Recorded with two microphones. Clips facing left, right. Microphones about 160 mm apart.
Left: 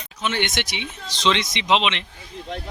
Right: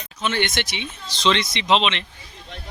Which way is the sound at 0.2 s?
15° left (ahead or behind).